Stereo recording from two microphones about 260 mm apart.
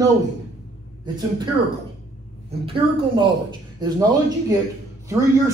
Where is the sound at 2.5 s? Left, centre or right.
Centre.